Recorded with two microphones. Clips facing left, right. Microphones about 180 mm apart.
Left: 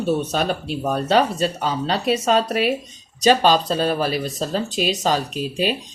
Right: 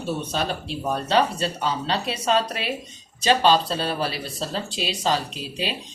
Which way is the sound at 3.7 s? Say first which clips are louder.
Left 6 dB; 50° left (ahead or behind).